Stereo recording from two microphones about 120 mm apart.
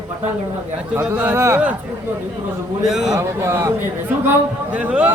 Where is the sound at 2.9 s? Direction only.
5° right (ahead or behind).